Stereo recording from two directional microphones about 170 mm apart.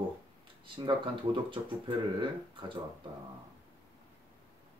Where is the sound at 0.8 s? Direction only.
30° right (ahead or behind).